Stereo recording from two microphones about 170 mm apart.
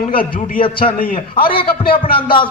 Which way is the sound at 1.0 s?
60° left (ahead or behind).